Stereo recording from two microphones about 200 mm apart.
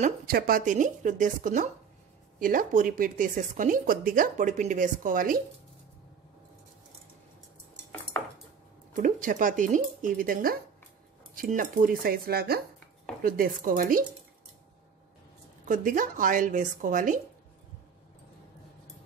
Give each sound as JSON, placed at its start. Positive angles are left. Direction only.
{"t": 0.0, "sound": "speech", "side_deg": -45}
{"t": 8.9, "sound": "speech", "side_deg": -40}
{"t": 15.6, "sound": "speech", "side_deg": -40}